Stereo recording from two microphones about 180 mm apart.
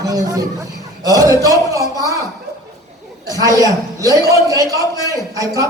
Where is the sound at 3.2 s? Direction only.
20° right (ahead or behind).